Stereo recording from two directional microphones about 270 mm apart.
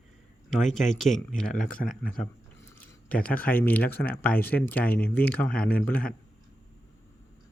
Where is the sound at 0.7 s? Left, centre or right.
Centre.